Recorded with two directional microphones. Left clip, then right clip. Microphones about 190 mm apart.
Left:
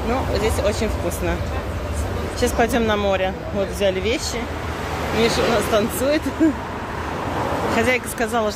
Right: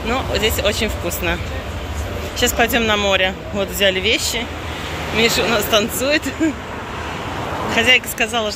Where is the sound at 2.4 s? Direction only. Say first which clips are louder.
Right 3 dB; 10° left (ahead or behind).